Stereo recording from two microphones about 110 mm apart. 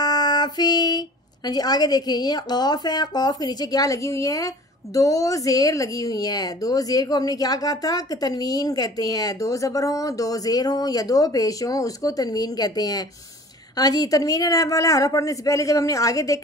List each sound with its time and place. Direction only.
0.0 s a woman's voice: 35° left (ahead or behind)